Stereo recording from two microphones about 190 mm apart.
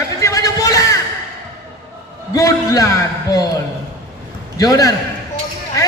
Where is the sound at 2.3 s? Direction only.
15° left (ahead or behind).